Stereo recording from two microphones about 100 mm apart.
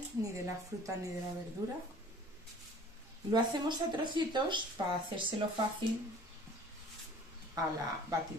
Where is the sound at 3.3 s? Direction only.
45° right (ahead or behind).